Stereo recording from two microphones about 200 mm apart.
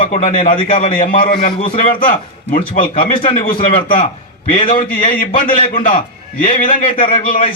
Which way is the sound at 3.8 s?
45° left (ahead or behind).